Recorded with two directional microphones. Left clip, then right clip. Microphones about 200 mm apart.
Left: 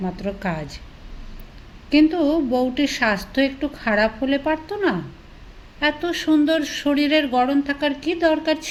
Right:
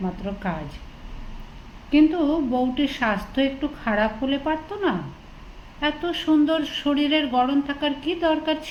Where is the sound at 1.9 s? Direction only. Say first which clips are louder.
Left 2 dB; 40° left (ahead or behind).